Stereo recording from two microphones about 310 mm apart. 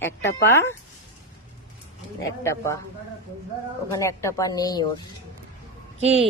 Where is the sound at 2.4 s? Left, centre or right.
Centre.